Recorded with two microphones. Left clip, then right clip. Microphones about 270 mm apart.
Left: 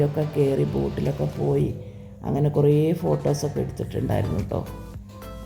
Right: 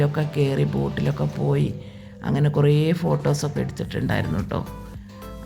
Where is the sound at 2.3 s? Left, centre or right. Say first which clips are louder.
Left 1 dB; centre.